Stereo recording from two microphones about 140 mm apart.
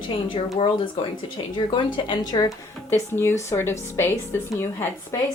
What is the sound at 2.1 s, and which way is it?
Speech, 30° left (ahead or behind).